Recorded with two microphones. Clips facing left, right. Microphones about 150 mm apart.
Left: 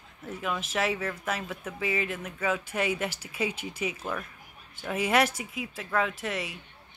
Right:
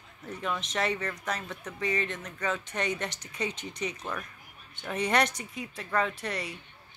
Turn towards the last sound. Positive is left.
turn(degrees=0)  # may be behind; listen again after turning